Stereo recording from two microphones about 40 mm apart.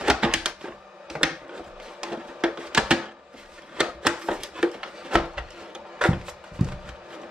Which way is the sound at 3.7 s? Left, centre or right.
Centre.